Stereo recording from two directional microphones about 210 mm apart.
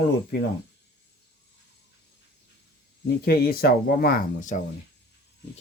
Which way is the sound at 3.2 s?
45° left (ahead or behind).